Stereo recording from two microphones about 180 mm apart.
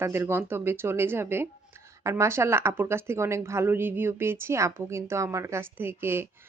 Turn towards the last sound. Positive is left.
turn(degrees=-10)  # may be behind; listen again after turning